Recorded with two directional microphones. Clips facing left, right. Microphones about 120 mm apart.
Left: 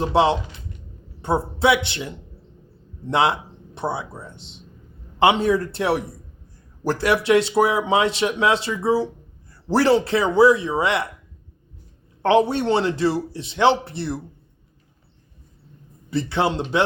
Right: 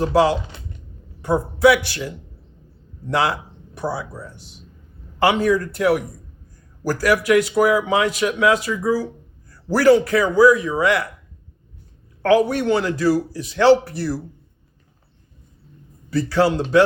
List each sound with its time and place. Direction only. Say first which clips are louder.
0.1 s a man's voice: right 1 dB; 25° left (ahead or behind)
12.2 s a man's voice: right 1 dB; 25° left (ahead or behind)
16.0 s a man's voice: right 4 dB; 20° left (ahead or behind)